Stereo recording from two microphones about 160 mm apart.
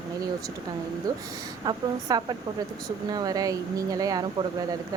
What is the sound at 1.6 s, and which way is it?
A woman's voice, 25° right (ahead or behind).